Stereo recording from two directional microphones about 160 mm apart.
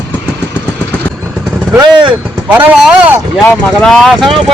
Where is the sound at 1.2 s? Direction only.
10° right (ahead or behind).